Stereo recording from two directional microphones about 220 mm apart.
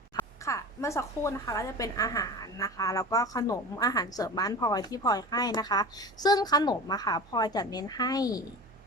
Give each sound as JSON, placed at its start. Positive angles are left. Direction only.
{"t": 0.2, "sound": "a woman's voice", "side_deg": 15}